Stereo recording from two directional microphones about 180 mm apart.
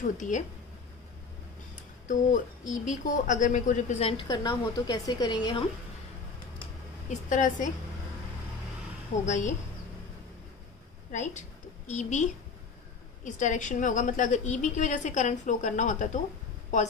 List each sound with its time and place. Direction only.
0.3 s a woman's voice: 45° left (ahead or behind)
2.0 s a woman's voice: 45° left (ahead or behind)
4.2 s a woman's voice: 20° left (ahead or behind)
7.1 s a woman's voice: 45° left (ahead or behind)
9.2 s a woman's voice: 45° left (ahead or behind)
11.1 s a woman's voice: 40° left (ahead or behind)